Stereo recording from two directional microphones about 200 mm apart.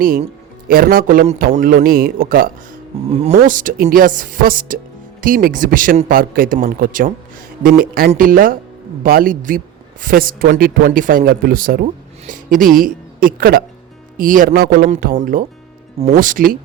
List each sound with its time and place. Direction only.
0.7 s speech: 45° right (ahead or behind)
3.1 s speech: 35° right (ahead or behind)